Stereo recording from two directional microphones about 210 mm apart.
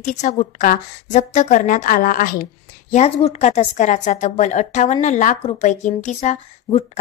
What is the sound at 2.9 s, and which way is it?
A woman's voice, 30° left (ahead or behind).